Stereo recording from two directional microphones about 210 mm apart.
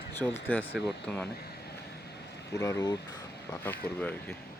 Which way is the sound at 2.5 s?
15° left (ahead or behind).